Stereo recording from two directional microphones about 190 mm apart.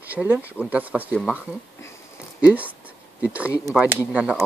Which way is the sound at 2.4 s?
5° right (ahead or behind).